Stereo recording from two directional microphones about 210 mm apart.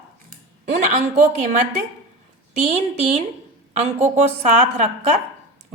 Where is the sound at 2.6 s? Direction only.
30° right (ahead or behind).